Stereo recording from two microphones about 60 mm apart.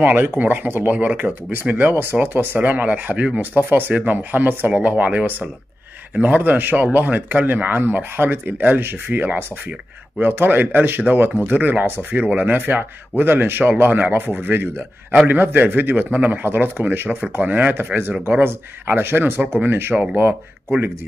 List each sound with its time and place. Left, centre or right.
0.0 s speech: right